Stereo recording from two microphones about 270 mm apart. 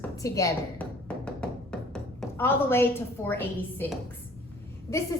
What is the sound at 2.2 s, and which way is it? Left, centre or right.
A woman's voice, centre.